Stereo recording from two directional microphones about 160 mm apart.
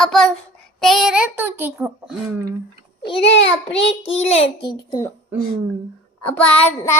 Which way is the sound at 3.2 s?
90° left.